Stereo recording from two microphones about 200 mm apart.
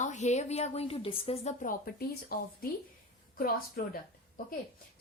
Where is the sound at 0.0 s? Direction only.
35° left (ahead or behind).